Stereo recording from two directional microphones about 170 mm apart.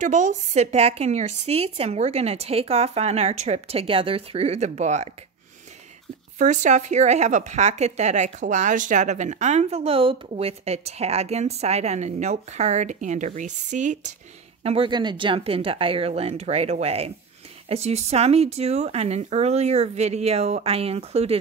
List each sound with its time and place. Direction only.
0.0 s a woman's voice: 45° right (ahead or behind)
6.3 s speech: 45° right (ahead or behind)
14.6 s a woman's voice: 35° right (ahead or behind)